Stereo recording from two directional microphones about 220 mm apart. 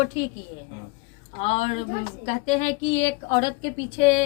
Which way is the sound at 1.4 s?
30° left (ahead or behind).